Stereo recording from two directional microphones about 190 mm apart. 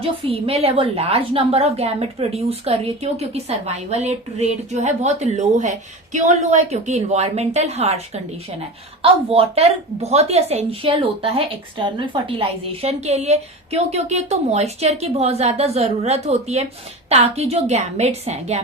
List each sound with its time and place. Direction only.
0.0 s a woman's voice: 30° right (ahead or behind)